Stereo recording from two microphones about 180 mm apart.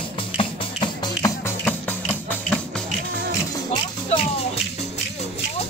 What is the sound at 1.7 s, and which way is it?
Music, 10° left (ahead or behind).